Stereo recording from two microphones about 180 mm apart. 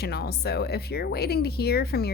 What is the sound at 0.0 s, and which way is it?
Speech, 60° left (ahead or behind).